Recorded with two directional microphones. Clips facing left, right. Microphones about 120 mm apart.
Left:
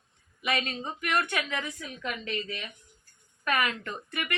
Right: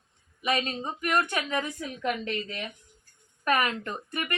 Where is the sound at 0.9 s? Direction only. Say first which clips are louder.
Right 2 dB; 35° right (ahead or behind).